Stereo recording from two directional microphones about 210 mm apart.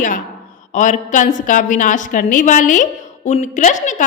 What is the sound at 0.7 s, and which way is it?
A woman's voice, 35° left (ahead or behind).